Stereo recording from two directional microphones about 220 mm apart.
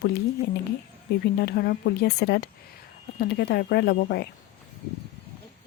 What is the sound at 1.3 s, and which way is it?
Speech, 45° left (ahead or behind).